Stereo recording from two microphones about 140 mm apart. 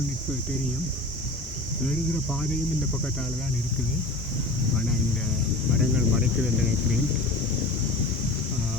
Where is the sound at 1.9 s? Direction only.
5° left (ahead or behind).